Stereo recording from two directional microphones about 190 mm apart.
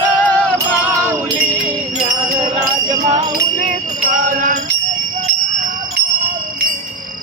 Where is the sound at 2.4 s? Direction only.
25° right (ahead or behind).